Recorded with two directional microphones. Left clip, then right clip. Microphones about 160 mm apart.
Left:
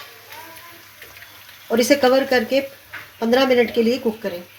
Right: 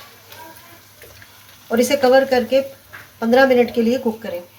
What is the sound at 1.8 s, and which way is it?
Speech, 40° left (ahead or behind).